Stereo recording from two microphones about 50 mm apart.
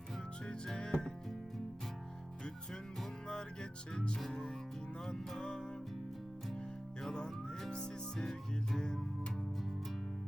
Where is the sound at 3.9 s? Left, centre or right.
Centre.